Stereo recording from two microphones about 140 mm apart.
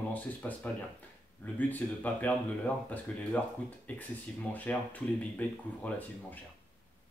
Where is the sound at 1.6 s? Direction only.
10° left (ahead or behind).